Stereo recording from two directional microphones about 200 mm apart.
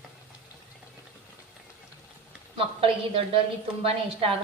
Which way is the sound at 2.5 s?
25° right (ahead or behind).